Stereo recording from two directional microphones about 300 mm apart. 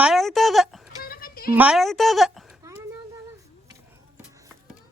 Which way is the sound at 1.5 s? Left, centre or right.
Centre.